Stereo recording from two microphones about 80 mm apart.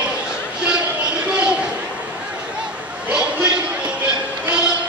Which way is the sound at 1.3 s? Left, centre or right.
Centre.